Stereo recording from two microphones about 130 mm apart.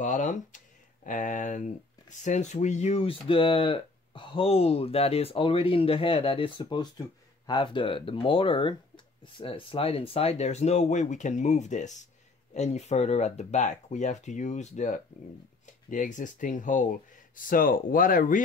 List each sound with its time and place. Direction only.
0.0 s speech: 75° left (ahead or behind)
1.0 s speech: 90° left; by 15.0 s 65° left (ahead or behind)
15.6 s speech: 80° left
17.5 s speech: 90° left